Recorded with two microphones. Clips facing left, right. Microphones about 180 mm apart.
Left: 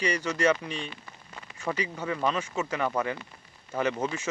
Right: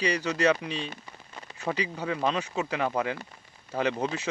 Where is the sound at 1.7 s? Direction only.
10° right (ahead or behind).